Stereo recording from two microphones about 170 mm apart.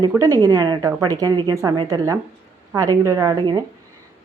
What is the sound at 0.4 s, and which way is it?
A woman's voice, 25° right (ahead or behind).